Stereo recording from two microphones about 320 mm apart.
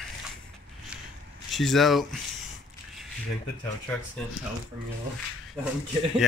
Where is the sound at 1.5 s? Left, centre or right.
Centre.